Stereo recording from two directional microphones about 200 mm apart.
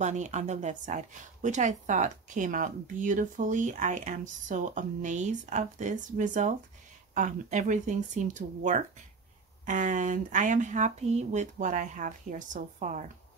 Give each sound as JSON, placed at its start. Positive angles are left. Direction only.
{"t": 0.0, "sound": "a woman's voice", "side_deg": -35}